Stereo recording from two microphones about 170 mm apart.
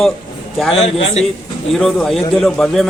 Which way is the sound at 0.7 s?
40° left (ahead or behind).